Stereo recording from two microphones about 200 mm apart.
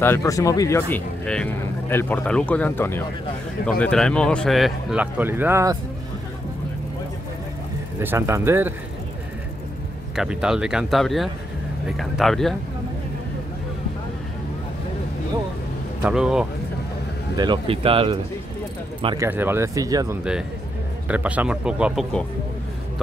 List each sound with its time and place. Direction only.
0.0 s speech: 15° left (ahead or behind); by 5.8 s 15° right (ahead or behind)
8.0 s speech: 10° right (ahead or behind)
10.1 s speech: 5° right (ahead or behind)
16.0 s speech: 5° right (ahead or behind)
17.4 s speech: 25° right (ahead or behind)
19.2 s speech: 10° right (ahead or behind)
21.1 s speech: 5° right (ahead or behind)